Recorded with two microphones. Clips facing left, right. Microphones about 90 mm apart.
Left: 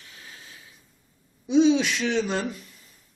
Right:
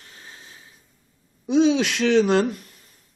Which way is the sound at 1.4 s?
60° right (ahead or behind).